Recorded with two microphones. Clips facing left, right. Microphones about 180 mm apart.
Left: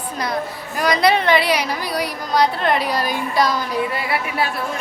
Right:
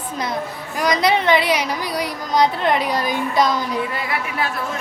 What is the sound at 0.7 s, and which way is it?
A woman's voice, 20° right (ahead or behind).